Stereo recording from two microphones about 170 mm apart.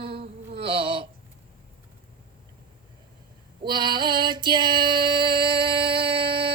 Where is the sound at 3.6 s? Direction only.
25° right (ahead or behind).